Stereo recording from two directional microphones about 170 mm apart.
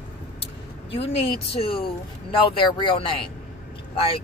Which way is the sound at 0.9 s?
35° left (ahead or behind).